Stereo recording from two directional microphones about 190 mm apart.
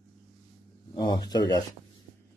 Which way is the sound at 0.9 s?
25° left (ahead or behind).